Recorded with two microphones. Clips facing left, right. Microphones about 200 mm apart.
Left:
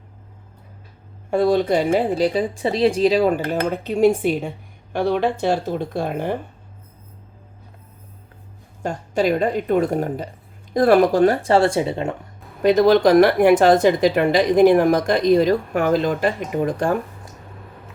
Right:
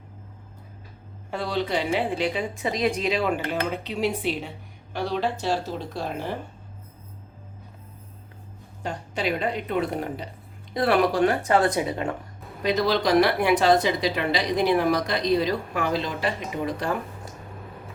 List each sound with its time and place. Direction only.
1.3 s a woman's voice: 50° left (ahead or behind)
8.8 s a woman's voice: 45° left (ahead or behind); by 12.1 s 25° left (ahead or behind)
12.6 s a woman's voice: 50° left (ahead or behind)